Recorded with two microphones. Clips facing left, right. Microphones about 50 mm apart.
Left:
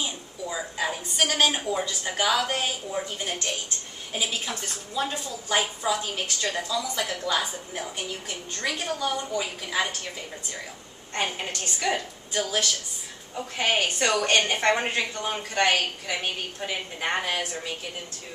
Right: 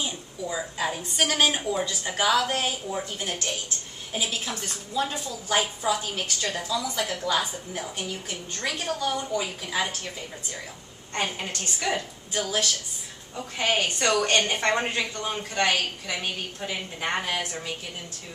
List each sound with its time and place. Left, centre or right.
0.0 s a woman's voice: centre
11.1 s a woman's voice: centre
13.6 s a woman's voice: centre
16.1 s a woman's voice: centre